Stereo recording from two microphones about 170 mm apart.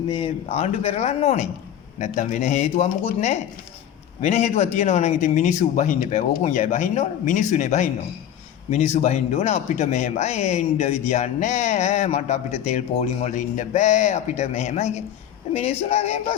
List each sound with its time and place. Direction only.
0.1 s speech: 30° left (ahead or behind)